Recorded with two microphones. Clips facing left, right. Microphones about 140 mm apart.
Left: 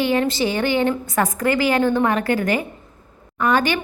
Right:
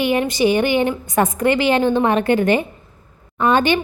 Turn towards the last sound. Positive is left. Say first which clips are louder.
# right 3 dB
turn(degrees=-25)  # may be behind; listen again after turning